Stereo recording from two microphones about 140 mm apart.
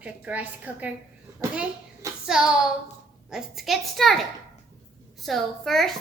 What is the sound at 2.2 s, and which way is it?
A woman's voice, 5° right (ahead or behind).